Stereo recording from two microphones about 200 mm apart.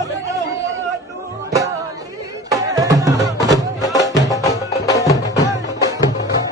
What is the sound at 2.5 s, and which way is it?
Music, 20° right (ahead or behind).